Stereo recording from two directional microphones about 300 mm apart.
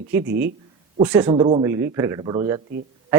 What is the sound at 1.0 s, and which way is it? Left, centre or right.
Speech, centre.